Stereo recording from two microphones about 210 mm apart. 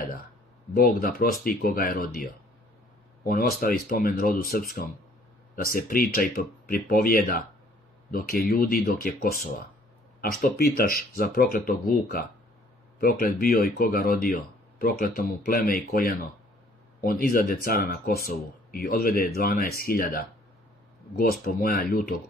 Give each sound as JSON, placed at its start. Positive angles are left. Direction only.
{"t": 0.7, "sound": "speech", "side_deg": 45}